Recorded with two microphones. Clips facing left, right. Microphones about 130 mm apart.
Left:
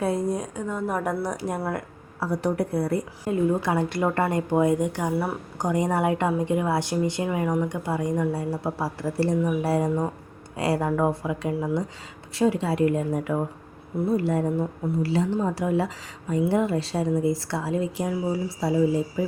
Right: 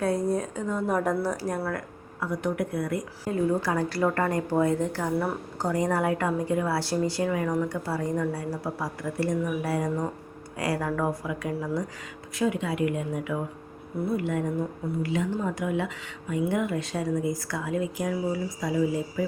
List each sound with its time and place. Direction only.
0.3 s a woman's voice: 10° left (ahead or behind)
1.2 s a woman's voice: 20° left (ahead or behind)
2.2 s speech: 35° left (ahead or behind)
3.2 s a woman's voice: 20° left (ahead or behind)